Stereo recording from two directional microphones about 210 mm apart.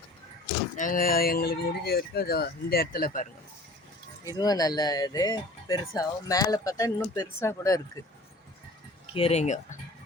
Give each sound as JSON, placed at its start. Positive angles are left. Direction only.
{"t": 0.8, "sound": "speech", "side_deg": 40}
{"t": 4.3, "sound": "speech", "side_deg": 20}
{"t": 9.1, "sound": "speech", "side_deg": 30}